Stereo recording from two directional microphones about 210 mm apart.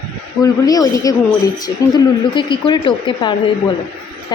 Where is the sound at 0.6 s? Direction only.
15° left (ahead or behind).